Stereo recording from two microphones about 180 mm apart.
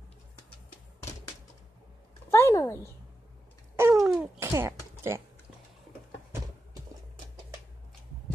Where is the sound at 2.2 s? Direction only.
15° left (ahead or behind).